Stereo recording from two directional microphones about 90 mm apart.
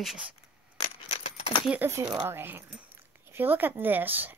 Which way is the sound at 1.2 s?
90° left.